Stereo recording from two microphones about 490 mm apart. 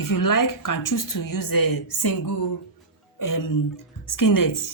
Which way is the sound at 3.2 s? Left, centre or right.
Left.